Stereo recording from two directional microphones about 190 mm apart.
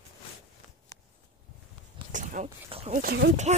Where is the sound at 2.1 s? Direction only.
40° right (ahead or behind).